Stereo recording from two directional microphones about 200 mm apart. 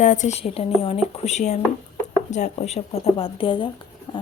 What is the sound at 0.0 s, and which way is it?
Speech, 40° left (ahead or behind).